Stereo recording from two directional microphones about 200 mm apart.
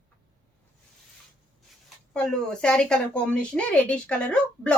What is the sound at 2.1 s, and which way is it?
Speech, 5° left (ahead or behind).